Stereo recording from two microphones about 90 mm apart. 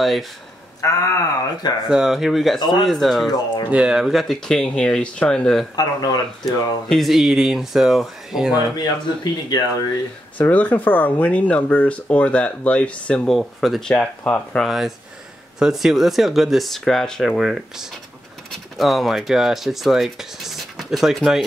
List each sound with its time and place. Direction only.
0.0 s speech: centre (ahead or behind)
0.7 s speech: 35° left (ahead or behind)
1.9 s speech: 5° right (ahead or behind)
3.7 s speech: 10° right (ahead or behind); by 5.7 s 5° left (ahead or behind)
5.8 s speech: 50° left (ahead or behind)
6.9 s speech: centre (ahead or behind)
8.7 s speech: 50° left (ahead or behind)
10.3 s speech: 20° left (ahead or behind)
13.3 s speech: centre (ahead or behind)
14.6 s speech: 5° right (ahead or behind)